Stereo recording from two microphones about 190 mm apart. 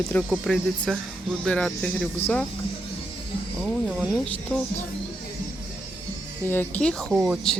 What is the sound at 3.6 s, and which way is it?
Speech, centre (ahead or behind).